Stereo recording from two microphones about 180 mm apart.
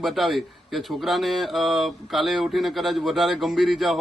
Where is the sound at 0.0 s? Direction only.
Centre (ahead or behind).